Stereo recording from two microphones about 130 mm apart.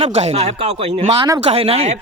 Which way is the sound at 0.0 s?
55° right (ahead or behind).